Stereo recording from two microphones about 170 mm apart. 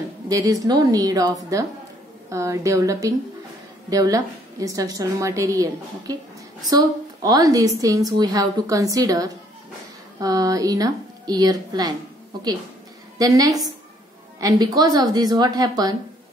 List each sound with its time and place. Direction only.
0.3 s a woman's voice: 20° right (ahead or behind)
13.2 s a woman's voice: 20° right (ahead or behind)